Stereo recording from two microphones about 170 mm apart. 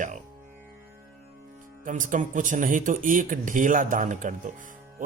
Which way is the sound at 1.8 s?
50° right (ahead or behind).